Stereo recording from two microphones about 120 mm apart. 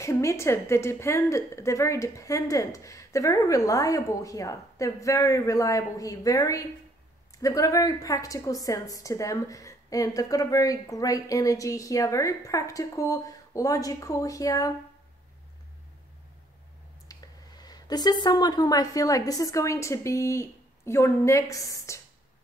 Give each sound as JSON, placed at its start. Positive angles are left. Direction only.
{"t": 0.0, "sound": "a woman's voice", "side_deg": 25}
{"t": 17.1, "sound": "speech", "side_deg": 35}